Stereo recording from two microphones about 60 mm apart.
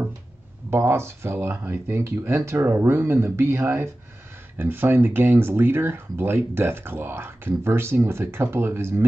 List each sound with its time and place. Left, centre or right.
0.7 s speech: right